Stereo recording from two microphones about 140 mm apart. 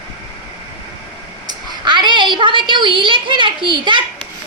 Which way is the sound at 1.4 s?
35° right (ahead or behind).